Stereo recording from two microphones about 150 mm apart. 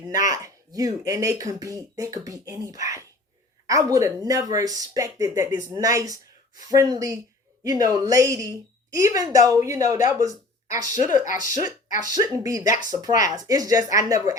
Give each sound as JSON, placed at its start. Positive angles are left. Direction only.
{"t": 0.2, "sound": "speech", "side_deg": -20}